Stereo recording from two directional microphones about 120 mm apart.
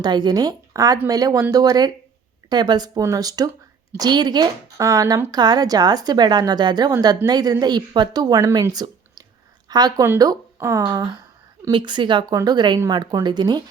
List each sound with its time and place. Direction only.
0.0 s a woman's voice: 35° right (ahead or behind)
8.7 s a sound: 35° right (ahead or behind)
9.6 s a woman's voice: 35° right (ahead or behind)